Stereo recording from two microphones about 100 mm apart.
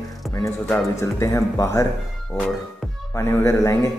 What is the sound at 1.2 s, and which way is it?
Speech, 30° left (ahead or behind).